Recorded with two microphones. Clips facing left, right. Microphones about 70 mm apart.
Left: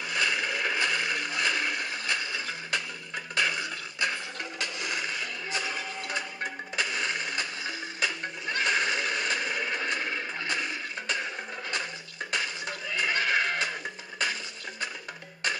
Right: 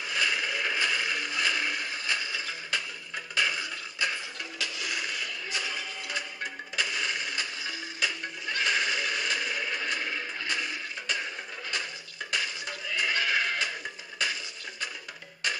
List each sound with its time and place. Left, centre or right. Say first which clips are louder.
0.0 s a sound: left 1 dB; left
4.6 s music: left 1 dB; left
12.3 s music: left 1 dB; left